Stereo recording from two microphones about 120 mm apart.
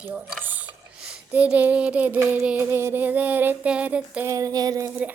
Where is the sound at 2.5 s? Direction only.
20° right (ahead or behind).